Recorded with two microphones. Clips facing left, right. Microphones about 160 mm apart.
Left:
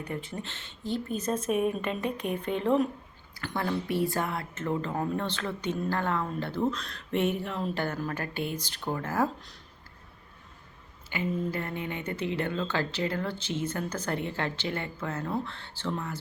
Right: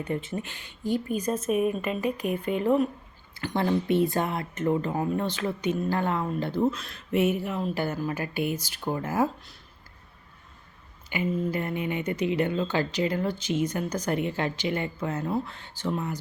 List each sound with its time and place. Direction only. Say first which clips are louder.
0.1 s speech: right 5 dB; 20° right (ahead or behind); by 2.8 s 5° right (ahead or behind)
3.3 s speech: right 5 dB; 20° right (ahead or behind)
11.1 s speech: right 3 dB; 15° right (ahead or behind)